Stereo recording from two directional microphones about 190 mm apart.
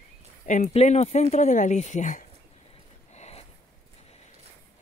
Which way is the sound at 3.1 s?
35° left (ahead or behind).